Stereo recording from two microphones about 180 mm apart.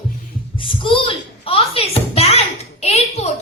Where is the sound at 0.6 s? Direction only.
30° left (ahead or behind).